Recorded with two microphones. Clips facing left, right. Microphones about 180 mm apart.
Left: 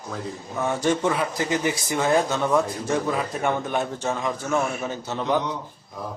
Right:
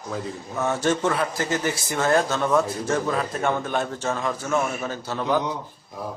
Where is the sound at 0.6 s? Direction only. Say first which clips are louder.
Even; 10° left (ahead or behind).